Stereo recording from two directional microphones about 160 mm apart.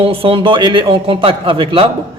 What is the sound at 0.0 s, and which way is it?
A man's voice, 35° right (ahead or behind).